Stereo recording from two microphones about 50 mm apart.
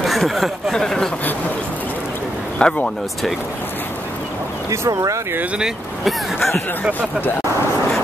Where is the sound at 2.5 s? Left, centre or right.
Centre.